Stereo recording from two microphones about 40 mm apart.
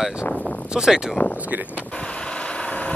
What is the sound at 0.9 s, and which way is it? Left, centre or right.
Speech, centre.